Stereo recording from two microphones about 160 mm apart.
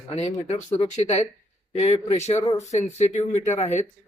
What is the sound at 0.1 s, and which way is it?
Speech, 45° left (ahead or behind).